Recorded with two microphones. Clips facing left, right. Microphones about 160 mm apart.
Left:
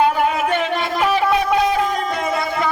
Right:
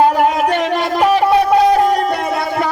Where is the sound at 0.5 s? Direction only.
80° right.